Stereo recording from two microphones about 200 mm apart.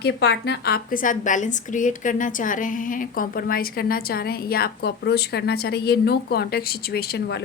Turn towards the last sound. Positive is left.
turn(degrees=55)  # may be behind; listen again after turning